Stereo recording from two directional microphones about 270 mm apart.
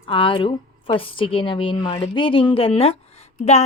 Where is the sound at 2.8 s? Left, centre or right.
Left.